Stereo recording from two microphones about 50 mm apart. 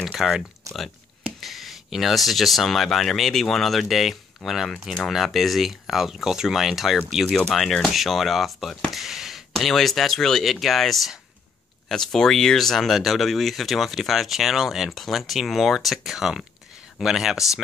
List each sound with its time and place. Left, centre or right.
0.0 s a sound: centre
0.7 s speech: right
1.4 s speech: centre
7.2 s speech: centre
8.9 s a sound: centre
9.6 s speech: centre